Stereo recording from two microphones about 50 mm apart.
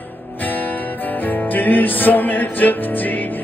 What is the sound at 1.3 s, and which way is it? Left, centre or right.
Music, left.